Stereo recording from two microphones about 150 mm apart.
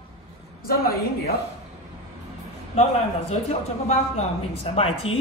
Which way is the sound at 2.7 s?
45° left (ahead or behind).